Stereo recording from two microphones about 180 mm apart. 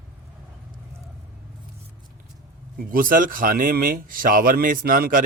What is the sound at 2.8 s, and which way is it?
A man's voice, 50° right (ahead or behind).